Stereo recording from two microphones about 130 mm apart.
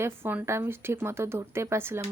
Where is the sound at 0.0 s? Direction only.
15° right (ahead or behind).